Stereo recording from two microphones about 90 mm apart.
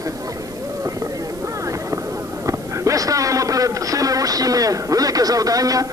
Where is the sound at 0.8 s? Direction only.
35° right (ahead or behind).